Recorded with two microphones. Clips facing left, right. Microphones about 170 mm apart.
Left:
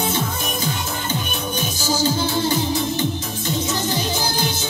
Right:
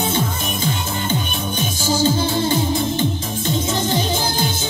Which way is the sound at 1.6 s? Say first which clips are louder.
Right 4 dB; 25° right (ahead or behind).